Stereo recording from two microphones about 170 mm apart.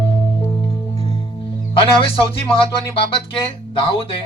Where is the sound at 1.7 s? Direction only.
30° left (ahead or behind).